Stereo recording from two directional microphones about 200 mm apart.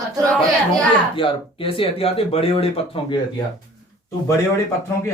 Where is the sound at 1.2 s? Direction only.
25° left (ahead or behind).